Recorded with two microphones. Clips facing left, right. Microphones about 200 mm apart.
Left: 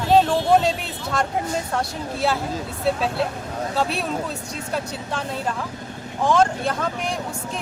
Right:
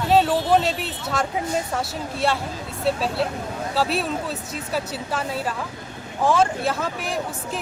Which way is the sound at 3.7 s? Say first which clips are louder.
Right 1 dB; centre (ahead or behind).